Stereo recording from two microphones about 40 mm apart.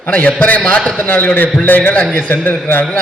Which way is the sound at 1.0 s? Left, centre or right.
Left.